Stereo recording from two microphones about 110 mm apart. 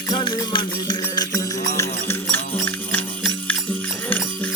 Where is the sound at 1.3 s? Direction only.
25° left (ahead or behind).